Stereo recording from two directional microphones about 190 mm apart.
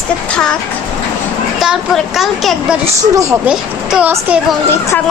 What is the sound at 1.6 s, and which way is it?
A woman's voice, centre (ahead or behind).